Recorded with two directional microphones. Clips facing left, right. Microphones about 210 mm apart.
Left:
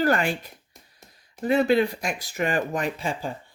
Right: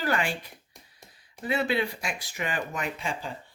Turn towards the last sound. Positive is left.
turn(degrees=35)  # may be behind; listen again after turning